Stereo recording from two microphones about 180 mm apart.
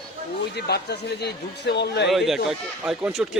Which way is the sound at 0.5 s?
65° left (ahead or behind).